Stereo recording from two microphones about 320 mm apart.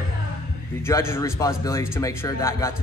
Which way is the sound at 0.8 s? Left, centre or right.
Centre.